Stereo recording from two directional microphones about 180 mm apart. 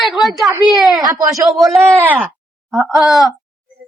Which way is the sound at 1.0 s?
20° right (ahead or behind).